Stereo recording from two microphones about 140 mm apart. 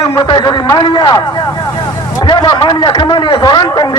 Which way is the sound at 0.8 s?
30° left (ahead or behind).